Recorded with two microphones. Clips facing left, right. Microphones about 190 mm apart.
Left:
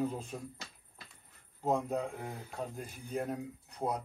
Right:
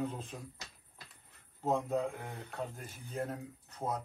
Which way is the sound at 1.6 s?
15° left (ahead or behind).